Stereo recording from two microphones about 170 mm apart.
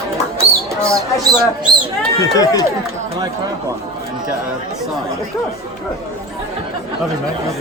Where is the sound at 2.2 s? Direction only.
20° left (ahead or behind).